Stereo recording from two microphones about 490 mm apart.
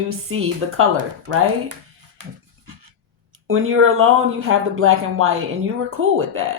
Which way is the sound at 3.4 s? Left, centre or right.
Right.